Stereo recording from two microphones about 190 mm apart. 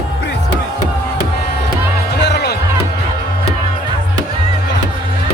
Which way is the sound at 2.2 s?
60° left (ahead or behind).